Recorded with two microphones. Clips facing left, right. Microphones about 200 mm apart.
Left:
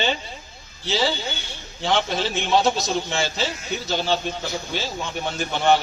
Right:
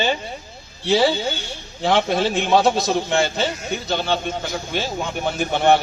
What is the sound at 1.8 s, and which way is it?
A man's voice, 60° right (ahead or behind).